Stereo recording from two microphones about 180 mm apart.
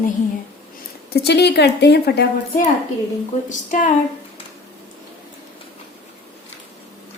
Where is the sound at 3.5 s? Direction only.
45° left (ahead or behind).